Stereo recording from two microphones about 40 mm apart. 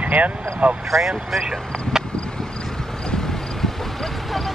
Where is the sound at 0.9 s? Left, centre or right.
Centre.